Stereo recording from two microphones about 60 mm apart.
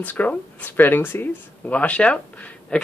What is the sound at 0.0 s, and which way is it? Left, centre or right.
Speech, left.